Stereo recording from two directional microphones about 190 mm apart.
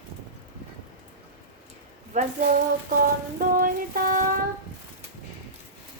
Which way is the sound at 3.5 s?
50° right (ahead or behind).